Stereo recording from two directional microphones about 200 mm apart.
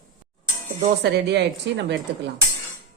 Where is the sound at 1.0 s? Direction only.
55° right (ahead or behind).